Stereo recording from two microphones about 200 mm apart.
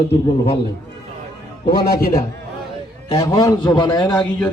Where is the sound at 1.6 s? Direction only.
50° left (ahead or behind).